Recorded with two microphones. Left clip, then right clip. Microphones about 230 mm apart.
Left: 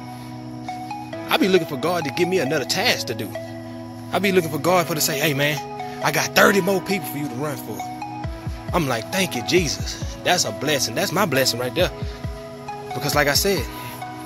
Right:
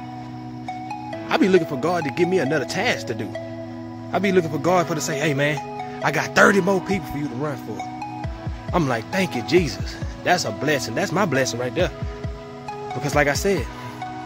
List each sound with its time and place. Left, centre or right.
1.3 s speech: centre
7.3 s speech: centre
8.7 s speech: centre
13.0 s speech: centre